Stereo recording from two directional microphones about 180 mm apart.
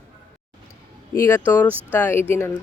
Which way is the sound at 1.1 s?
15° left (ahead or behind).